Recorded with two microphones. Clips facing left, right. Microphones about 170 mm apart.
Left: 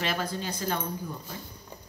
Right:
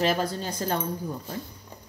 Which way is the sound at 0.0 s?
40° right (ahead or behind).